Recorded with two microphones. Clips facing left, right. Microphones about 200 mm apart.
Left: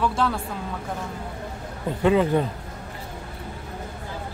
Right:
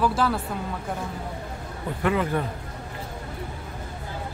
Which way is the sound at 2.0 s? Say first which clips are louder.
Left 5 dB; 20° left (ahead or behind).